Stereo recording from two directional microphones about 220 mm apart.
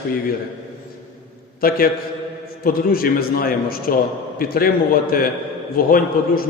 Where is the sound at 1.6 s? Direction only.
40° left (ahead or behind).